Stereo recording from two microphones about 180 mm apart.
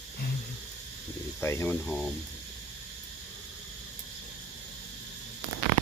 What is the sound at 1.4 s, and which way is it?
Speech, 15° left (ahead or behind).